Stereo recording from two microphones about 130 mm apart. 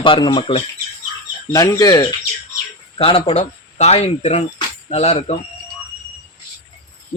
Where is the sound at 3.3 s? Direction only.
60° left (ahead or behind).